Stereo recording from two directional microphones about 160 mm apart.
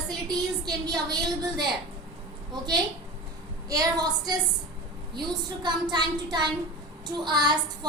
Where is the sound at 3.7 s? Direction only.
25° right (ahead or behind).